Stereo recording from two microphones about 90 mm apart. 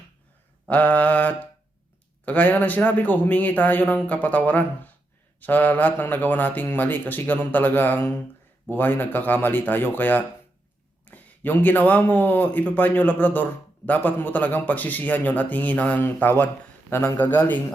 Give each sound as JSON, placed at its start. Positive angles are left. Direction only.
{"t": 0.7, "sound": "mantra", "side_deg": 15}
{"t": 2.2, "sound": "speech", "side_deg": 20}